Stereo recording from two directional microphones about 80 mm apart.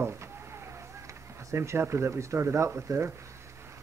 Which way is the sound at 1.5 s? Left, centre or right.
Right.